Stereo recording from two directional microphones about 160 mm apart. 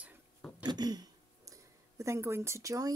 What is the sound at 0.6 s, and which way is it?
Speech, 25° right (ahead or behind).